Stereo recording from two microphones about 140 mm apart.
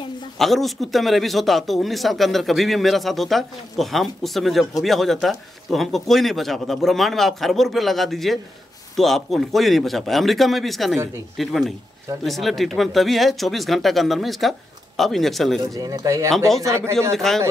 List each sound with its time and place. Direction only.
0.4 s a man's voice: centre (ahead or behind)
15.7 s speech: 25° right (ahead or behind)
16.3 s a man's voice: centre (ahead or behind)
16.6 s speech: 20° right (ahead or behind)
17.2 s a man's voice: 5° left (ahead or behind)